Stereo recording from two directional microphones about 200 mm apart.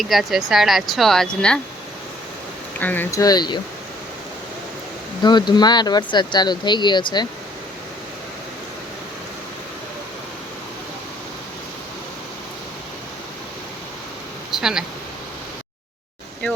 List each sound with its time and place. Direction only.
0.0 s speech: centre (ahead or behind)
2.7 s speech: 10° left (ahead or behind)
5.2 s speech: 20° left (ahead or behind)
14.5 s a sound: 5° right (ahead or behind)